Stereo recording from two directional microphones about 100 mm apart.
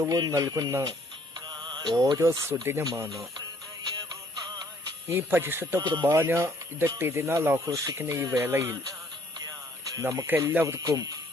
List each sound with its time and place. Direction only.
0.0 s speech: 35° right (ahead or behind)
1.5 s speech: 45° right (ahead or behind)
4.4 s music: 45° right (ahead or behind)
5.0 s speech: 25° right (ahead or behind)
5.8 s speech: 45° right (ahead or behind)
6.1 s speech: 25° right (ahead or behind)
9.4 s music: 35° right (ahead or behind)
10.0 s speech: 30° right (ahead or behind)
10.2 s speech: 20° right (ahead or behind)
10.8 s speech: 40° right (ahead or behind)